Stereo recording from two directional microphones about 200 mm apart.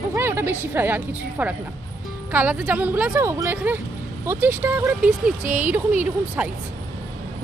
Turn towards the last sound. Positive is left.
turn(degrees=-5)  # may be behind; listen again after turning